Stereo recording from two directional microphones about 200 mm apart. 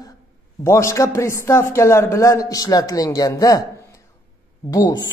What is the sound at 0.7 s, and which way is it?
A man's voice, 15° left (ahead or behind).